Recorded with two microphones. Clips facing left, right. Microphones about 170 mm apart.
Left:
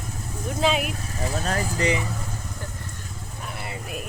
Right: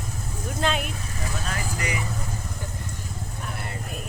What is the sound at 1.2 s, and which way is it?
Speech, 35° left (ahead or behind).